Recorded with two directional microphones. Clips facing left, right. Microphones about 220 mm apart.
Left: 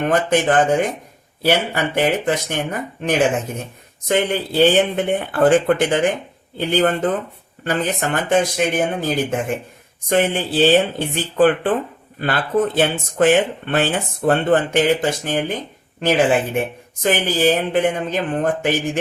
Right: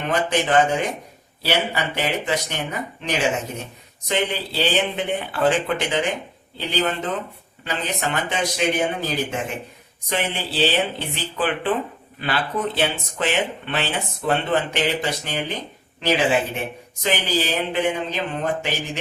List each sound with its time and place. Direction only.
0.0 s speech: 50° left (ahead or behind)